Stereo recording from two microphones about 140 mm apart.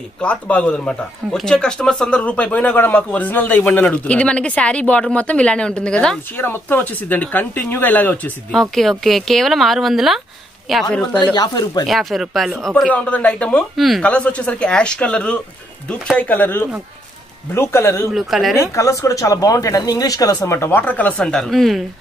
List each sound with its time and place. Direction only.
0.2 s speech: 10° left (ahead or behind)
11.3 s speech: 30° left (ahead or behind)
11.9 s speech: centre (ahead or behind); by 18.0 s 20° left (ahead or behind)
18.1 s speech: centre (ahead or behind)
18.8 s speech: 20° left (ahead or behind); by 21.8 s centre (ahead or behind)